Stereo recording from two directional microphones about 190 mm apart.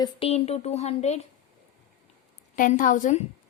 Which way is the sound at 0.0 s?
30° left (ahead or behind).